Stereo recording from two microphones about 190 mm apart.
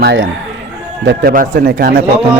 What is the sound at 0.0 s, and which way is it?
Speech, 65° right (ahead or behind).